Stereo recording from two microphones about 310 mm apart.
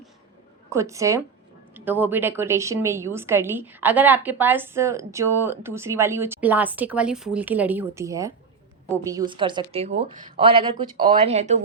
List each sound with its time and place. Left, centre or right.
0.7 s a woman's voice: centre